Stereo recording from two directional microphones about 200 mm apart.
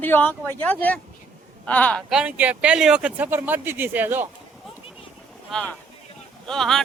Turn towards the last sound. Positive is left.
turn(degrees=0)  # may be behind; listen again after turning